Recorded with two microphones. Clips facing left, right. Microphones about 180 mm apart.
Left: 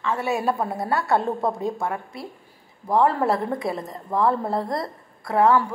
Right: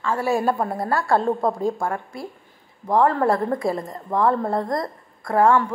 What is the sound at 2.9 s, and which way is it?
A woman's voice, 5° left (ahead or behind).